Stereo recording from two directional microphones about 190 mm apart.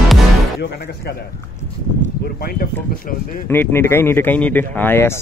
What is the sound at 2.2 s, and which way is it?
Speech, 55° left (ahead or behind).